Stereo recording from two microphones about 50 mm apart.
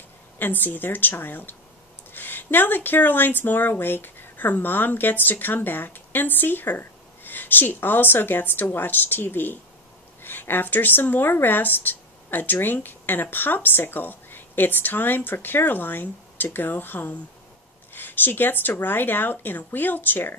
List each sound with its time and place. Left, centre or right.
0.4 s speech: left